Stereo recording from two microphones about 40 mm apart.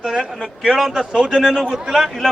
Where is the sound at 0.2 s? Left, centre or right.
Centre.